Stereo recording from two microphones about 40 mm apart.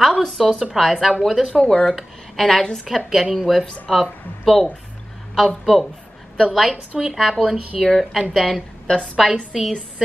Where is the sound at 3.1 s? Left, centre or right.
Centre.